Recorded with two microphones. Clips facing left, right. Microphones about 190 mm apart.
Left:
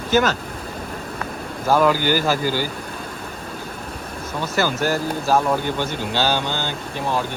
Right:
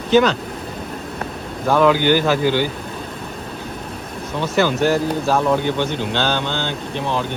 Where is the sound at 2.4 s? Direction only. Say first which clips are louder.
Right 5 dB; 60° right (ahead or behind).